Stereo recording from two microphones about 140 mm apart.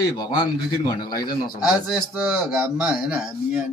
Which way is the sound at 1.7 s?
5° right (ahead or behind).